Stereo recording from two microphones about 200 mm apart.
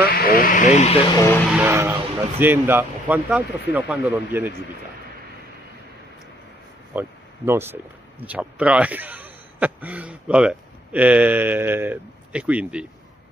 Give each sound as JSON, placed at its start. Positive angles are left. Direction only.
{"t": 0.0, "sound": "speech", "side_deg": 50}
{"t": 1.1, "sound": "speech", "side_deg": 10}
{"t": 1.6, "sound": "speech", "side_deg": -10}
{"t": 6.9, "sound": "speech", "side_deg": -10}